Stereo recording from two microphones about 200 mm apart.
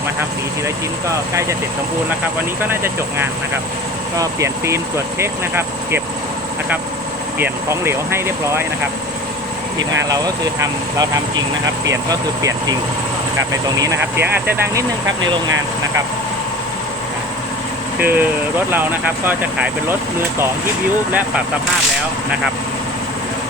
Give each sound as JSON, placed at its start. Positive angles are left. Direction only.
{"t": 1.0, "sound": "speech", "side_deg": -15}
{"t": 2.6, "sound": "speech", "side_deg": -10}
{"t": 7.3, "sound": "speech", "side_deg": -10}
{"t": 9.7, "sound": "speech", "side_deg": -65}
{"t": 10.1, "sound": "speech", "side_deg": -20}
{"t": 18.0, "sound": "speech", "side_deg": -10}